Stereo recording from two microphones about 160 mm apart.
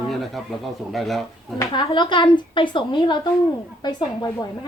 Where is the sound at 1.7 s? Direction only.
30° left (ahead or behind).